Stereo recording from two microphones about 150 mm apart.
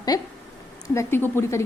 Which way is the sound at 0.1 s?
25° left (ahead or behind).